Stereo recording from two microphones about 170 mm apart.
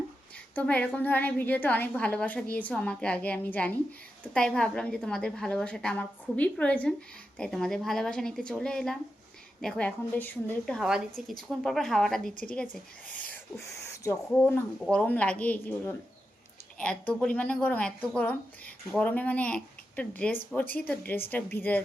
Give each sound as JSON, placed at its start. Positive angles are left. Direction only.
{"t": 0.5, "sound": "a woman's voice", "side_deg": 10}